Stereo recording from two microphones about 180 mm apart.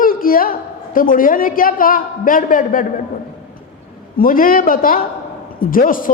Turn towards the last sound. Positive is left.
turn(degrees=50)  # may be behind; listen again after turning